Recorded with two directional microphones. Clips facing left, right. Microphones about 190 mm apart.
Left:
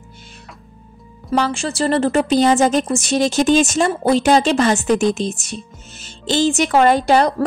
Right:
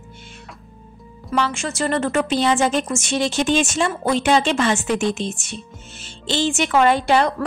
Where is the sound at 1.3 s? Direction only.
35° left (ahead or behind).